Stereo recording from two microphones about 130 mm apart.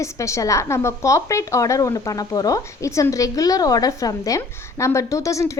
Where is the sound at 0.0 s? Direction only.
25° left (ahead or behind).